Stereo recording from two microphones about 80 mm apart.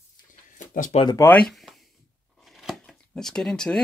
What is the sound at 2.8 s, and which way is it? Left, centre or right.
Speech, centre.